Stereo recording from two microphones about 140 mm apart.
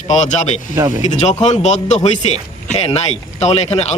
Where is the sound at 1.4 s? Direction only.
55° left (ahead or behind).